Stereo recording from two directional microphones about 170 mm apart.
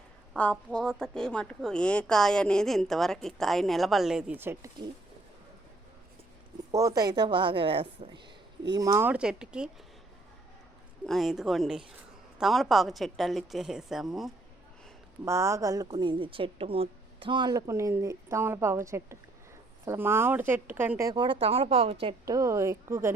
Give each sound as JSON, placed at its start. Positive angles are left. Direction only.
{"t": 0.4, "sound": "a woman's voice", "side_deg": 10}
{"t": 6.7, "sound": "a woman's voice", "side_deg": -20}
{"t": 11.0, "sound": "speech", "side_deg": 0}
{"t": 15.2, "sound": "a woman's voice", "side_deg": -15}
{"t": 21.1, "sound": "speech", "side_deg": -30}
{"t": 22.3, "sound": "speech", "side_deg": -20}